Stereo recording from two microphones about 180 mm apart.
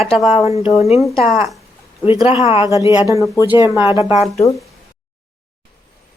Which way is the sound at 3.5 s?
20° left (ahead or behind).